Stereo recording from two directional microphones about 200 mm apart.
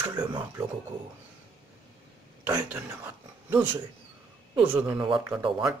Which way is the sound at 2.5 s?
15° right (ahead or behind).